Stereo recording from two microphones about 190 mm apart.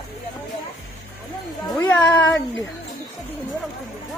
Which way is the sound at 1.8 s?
10° left (ahead or behind).